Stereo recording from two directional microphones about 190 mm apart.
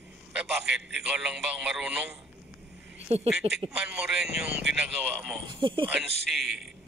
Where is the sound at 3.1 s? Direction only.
35° right (ahead or behind).